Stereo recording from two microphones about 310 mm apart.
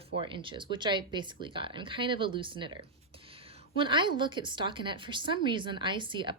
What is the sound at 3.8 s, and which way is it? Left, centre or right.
Speech, centre.